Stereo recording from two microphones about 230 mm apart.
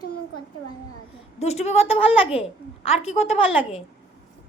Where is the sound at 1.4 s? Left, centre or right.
Left.